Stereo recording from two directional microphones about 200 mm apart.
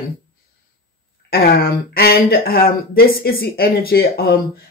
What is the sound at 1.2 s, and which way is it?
Speech, 50° left (ahead or behind).